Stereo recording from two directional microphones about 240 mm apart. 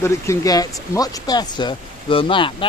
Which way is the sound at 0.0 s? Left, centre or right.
Centre.